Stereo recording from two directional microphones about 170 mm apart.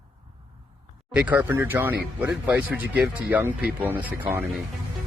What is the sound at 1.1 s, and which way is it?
Speech, 10° right (ahead or behind).